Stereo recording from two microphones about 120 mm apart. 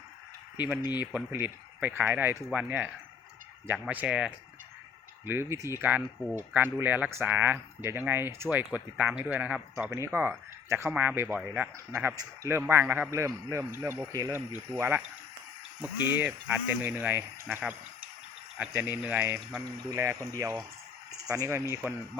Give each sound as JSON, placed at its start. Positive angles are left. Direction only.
{"t": 0.5, "sound": "speech", "side_deg": -15}
{"t": 5.2, "sound": "speech", "side_deg": -20}
{"t": 9.9, "sound": "speech", "side_deg": -20}
{"t": 12.1, "sound": "speech", "side_deg": -25}
{"t": 14.8, "sound": "speech", "side_deg": -15}
{"t": 18.7, "sound": "speech", "side_deg": -20}